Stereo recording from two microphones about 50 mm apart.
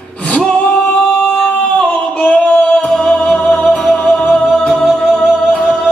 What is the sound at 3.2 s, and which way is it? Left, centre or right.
Music, centre.